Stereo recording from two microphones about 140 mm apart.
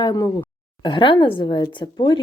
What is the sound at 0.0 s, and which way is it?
A woman's voice, 30° left (ahead or behind).